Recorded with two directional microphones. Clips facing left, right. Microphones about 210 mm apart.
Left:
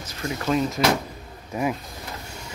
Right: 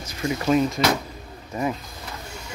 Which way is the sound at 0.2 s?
10° right (ahead or behind).